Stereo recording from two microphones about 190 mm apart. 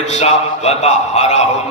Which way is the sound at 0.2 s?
35° left (ahead or behind).